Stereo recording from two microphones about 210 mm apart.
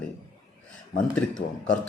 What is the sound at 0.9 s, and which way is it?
Speech, 5° left (ahead or behind).